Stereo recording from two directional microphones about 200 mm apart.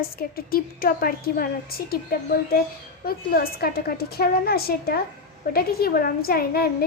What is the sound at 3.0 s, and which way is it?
Speech, 50° left (ahead or behind).